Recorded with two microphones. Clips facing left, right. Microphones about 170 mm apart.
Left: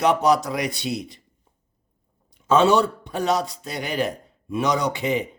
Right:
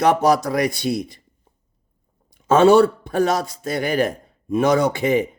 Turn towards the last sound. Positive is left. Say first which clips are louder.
# right 6 dB
turn(degrees=-50)  # may be behind; listen again after turning